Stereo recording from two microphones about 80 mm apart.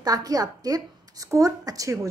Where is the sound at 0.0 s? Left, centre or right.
Right.